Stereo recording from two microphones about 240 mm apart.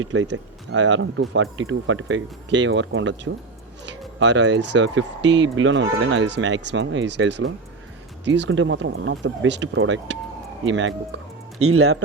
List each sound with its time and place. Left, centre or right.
0.0 s speech: right
4.2 s speech: right
11.6 s speech: right